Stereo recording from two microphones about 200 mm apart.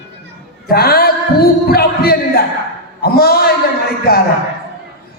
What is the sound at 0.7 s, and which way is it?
A man's voice, 50° left (ahead or behind).